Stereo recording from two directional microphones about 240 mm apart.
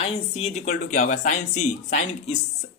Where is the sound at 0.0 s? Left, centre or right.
Left.